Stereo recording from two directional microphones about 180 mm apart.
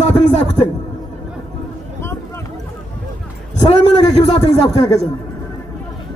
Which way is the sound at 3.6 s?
35° left (ahead or behind).